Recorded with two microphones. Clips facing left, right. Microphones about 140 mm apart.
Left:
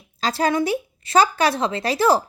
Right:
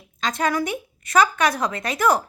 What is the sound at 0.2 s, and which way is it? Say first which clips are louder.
Speech: left 2 dB; 30° left (ahead or behind).